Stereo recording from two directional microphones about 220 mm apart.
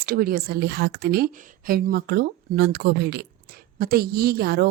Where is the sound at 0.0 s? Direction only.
40° right (ahead or behind).